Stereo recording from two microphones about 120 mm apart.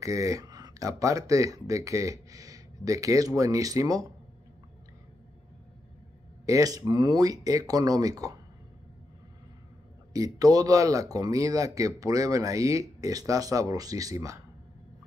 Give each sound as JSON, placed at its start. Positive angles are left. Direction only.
{"t": 0.0, "sound": "speech", "side_deg": -30}
{"t": 6.4, "sound": "speech", "side_deg": -30}
{"t": 10.1, "sound": "speech", "side_deg": -30}